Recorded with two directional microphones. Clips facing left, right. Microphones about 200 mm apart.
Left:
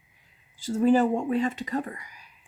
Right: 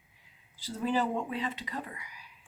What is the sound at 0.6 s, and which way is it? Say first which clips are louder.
Speech: left 10 dB; 45° left (ahead or behind).